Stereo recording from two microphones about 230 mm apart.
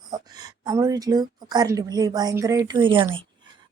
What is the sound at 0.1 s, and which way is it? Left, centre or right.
A woman's voice, centre.